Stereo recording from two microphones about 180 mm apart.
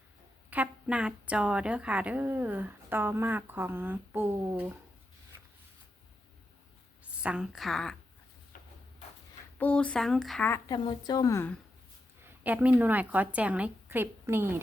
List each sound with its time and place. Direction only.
0.5 s a woman's voice: 5° right (ahead or behind)
7.2 s speech: 5° right (ahead or behind)
8.5 s a sound: 50° left (ahead or behind)
9.6 s speech: 5° left (ahead or behind)
10.5 s a woman's voice: 20° left (ahead or behind)
12.2 s a woman's voice: 10° right (ahead or behind)